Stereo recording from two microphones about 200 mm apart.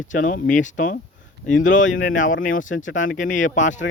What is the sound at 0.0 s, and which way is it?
A man's voice, 40° left (ahead or behind).